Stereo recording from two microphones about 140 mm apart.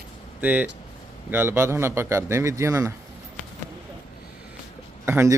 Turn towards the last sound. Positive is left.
turn(degrees=-20)  # may be behind; listen again after turning